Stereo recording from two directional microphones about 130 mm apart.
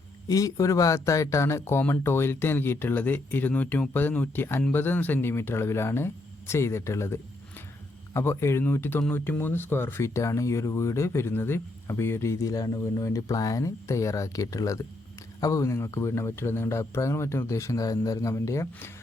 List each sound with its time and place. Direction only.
0.3 s speech: 25° left (ahead or behind)